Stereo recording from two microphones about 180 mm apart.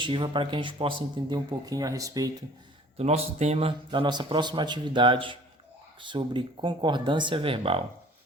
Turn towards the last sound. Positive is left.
turn(degrees=-30)  # may be behind; listen again after turning